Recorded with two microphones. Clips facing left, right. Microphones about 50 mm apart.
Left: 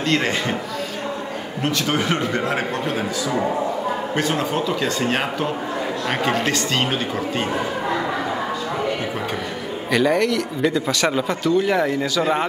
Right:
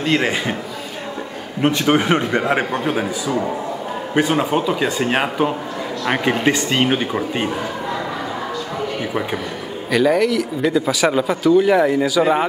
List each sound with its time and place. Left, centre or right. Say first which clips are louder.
0.0 s a man's voice: right 2 dB; centre
1.6 s a man's voice: right 6 dB; right
4.1 s a man's voice: right 8 dB; centre
9.8 s speech: right 2 dB; centre